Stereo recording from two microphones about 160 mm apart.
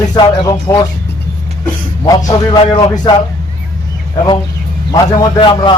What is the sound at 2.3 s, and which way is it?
Speech, 25° left (ahead or behind).